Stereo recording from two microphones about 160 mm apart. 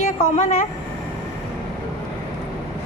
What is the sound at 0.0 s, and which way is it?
Speech, 50° left (ahead or behind).